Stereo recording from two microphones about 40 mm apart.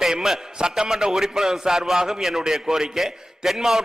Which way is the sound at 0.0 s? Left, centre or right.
Centre.